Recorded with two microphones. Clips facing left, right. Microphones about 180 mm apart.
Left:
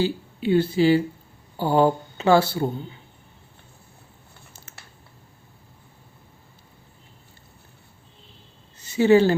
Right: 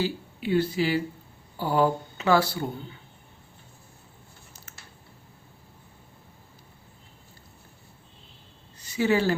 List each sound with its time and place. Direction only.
0.0 s speech: 25° left (ahead or behind)
8.8 s speech: 25° left (ahead or behind)